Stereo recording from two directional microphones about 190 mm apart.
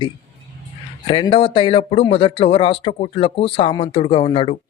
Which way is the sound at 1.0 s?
25° left (ahead or behind).